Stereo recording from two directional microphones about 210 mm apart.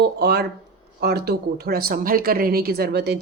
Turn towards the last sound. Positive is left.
turn(degrees=-50)  # may be behind; listen again after turning